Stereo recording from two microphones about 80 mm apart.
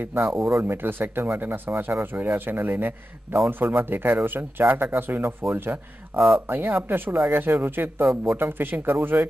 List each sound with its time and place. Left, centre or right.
0.0 s speech: right
6.1 s speech: centre
6.4 s speech: right